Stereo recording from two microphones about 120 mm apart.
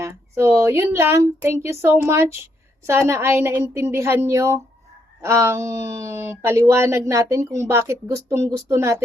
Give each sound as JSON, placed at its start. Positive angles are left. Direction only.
{"t": 0.0, "sound": "speech", "side_deg": -20}